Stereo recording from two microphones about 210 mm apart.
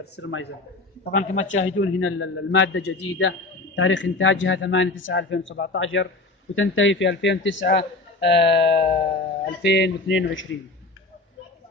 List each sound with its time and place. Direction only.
0.0 s a man's voice: 55° left (ahead or behind)
1.1 s a man's voice: 70° left (ahead or behind)